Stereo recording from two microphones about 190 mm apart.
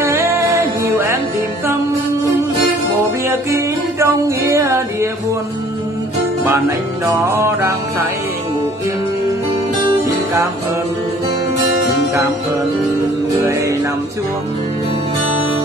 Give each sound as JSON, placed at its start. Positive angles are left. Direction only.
{"t": 0.0, "sound": "music", "side_deg": -15}
{"t": 3.3, "sound": "music", "side_deg": -15}
{"t": 7.1, "sound": "music", "side_deg": -15}